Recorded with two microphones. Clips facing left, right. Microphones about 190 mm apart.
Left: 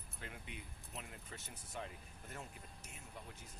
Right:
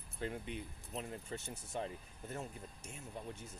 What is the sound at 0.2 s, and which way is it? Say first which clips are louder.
Speech: right 10 dB; 35° right (ahead or behind).